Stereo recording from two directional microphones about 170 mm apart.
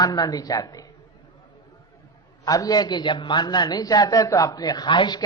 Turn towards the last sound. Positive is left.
turn(degrees=25)  # may be behind; listen again after turning